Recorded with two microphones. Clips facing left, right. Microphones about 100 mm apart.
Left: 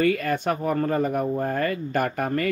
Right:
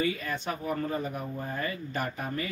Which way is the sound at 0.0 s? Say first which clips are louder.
Left 8 dB; 60° left (ahead or behind).